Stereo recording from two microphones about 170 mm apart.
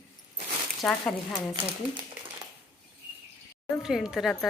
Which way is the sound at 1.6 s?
30° right (ahead or behind).